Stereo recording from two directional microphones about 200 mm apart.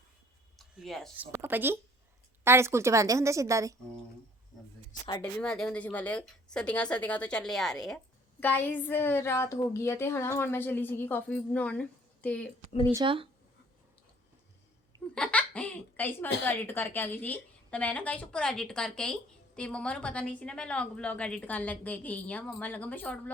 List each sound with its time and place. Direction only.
0.6 s a woman's voice: centre (ahead or behind); by 3.8 s 15° right (ahead or behind)
5.2 s a woman's voice: 5° left (ahead or behind)
12.9 s speech: 25° right (ahead or behind)
15.1 s a woman's voice: 5° left (ahead or behind)